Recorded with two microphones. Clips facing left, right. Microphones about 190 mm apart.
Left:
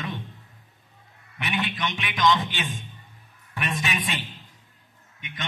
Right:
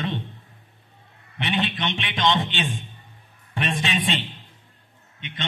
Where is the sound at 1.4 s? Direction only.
25° right (ahead or behind).